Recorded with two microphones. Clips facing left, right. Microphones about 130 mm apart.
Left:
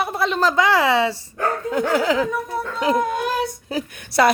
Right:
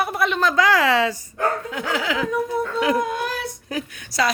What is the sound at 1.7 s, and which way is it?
Dog, 45° left (ahead or behind).